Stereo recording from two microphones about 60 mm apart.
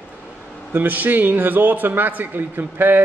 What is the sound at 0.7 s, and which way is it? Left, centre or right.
A man's voice, right.